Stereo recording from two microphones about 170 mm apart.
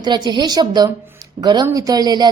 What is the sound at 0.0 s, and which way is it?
A woman's voice, 25° right (ahead or behind).